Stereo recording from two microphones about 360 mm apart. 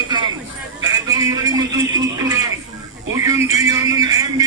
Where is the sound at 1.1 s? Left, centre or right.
Centre.